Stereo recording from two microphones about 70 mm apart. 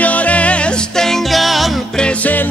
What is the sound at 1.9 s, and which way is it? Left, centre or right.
Music, centre.